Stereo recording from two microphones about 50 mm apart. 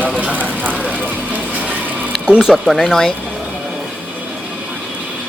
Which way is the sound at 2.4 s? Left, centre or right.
Centre.